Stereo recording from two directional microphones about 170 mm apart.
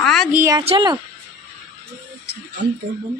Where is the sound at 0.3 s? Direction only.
10° right (ahead or behind).